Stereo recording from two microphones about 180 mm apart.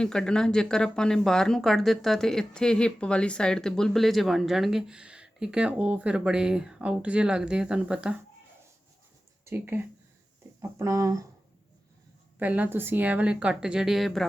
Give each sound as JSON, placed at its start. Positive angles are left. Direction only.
{"t": 0.0, "sound": "speech", "side_deg": 5}
{"t": 9.4, "sound": "a woman's voice", "side_deg": -15}
{"t": 12.4, "sound": "a woman's voice", "side_deg": -10}